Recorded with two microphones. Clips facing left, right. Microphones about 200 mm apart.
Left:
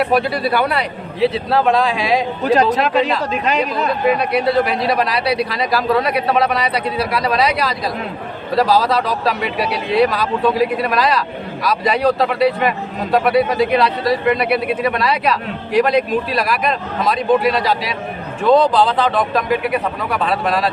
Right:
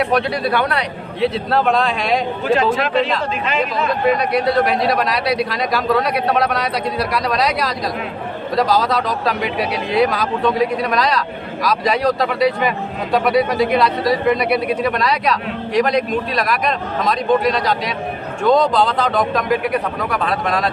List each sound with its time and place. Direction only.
0.0 s speech: 5° left (ahead or behind)
2.4 s speech: 40° left (ahead or behind)
3.6 s speech: centre (ahead or behind)